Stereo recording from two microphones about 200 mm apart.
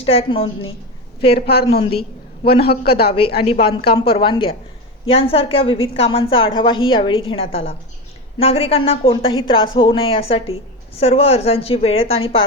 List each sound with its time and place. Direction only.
0.0 s a woman's voice: 30° left (ahead or behind)
1.3 s a man's voice: 50° left (ahead or behind)
2.0 s a sound: 50° left (ahead or behind)
2.6 s a man's voice: 50° left (ahead or behind)
3.4 s a woman's voice: 30° left (ahead or behind)